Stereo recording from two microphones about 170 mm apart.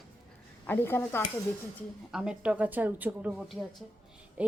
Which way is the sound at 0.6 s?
10° left (ahead or behind).